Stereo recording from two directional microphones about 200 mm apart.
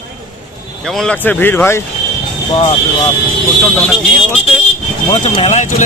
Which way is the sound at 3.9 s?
Centre (ahead or behind).